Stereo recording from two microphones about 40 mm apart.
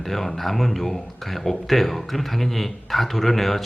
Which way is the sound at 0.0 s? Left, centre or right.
Centre.